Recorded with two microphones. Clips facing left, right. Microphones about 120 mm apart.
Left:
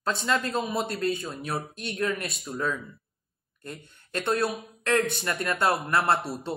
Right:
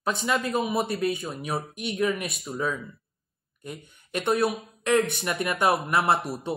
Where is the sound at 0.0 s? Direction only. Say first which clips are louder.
Right 1 dB; 10° right (ahead or behind).